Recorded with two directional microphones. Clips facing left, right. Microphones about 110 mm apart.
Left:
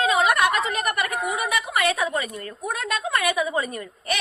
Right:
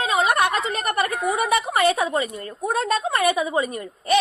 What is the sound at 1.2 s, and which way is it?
A woman's voice, 35° right (ahead or behind).